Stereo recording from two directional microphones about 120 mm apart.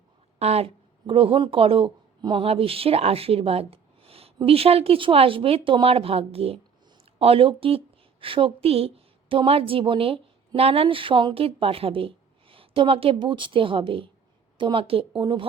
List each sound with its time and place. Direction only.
0.3 s a woman's voice: 60° right (ahead or behind)